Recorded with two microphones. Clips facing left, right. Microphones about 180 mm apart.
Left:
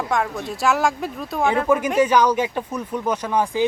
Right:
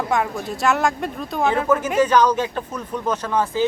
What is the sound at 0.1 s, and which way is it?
Speech, centre (ahead or behind).